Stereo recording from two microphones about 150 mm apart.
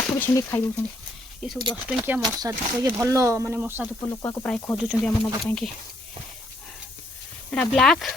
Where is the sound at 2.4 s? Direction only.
25° right (ahead or behind).